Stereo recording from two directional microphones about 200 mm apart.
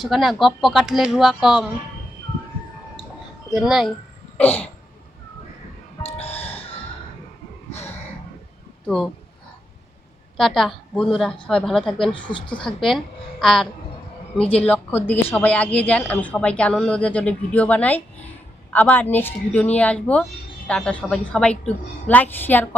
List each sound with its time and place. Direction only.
0.0 s a woman's voice: centre (ahead or behind)
3.5 s a woman's voice: centre (ahead or behind)
6.5 s music: 30° left (ahead or behind)
7.7 s a sound: 35° left (ahead or behind)
10.3 s a woman's voice: centre (ahead or behind)